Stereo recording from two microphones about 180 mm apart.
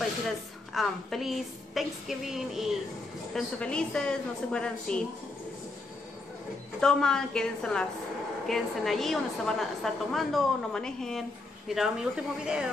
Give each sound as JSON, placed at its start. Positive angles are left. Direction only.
{"t": 0.7, "sound": "a woman's voice", "side_deg": 0}
{"t": 6.8, "sound": "a woman's voice", "side_deg": 5}